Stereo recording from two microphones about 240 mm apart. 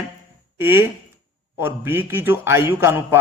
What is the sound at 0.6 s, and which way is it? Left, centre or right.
A man's voice, centre.